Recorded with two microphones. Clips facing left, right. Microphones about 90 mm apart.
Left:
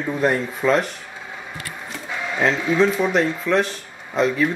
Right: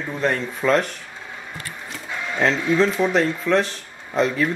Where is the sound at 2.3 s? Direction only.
5° left (ahead or behind).